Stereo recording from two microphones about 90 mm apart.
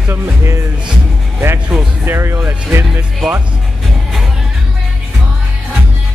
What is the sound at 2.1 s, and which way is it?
Speech, 30° right (ahead or behind).